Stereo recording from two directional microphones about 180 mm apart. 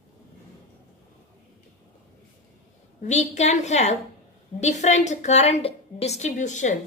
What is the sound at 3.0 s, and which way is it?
A woman's voice, 40° left (ahead or behind).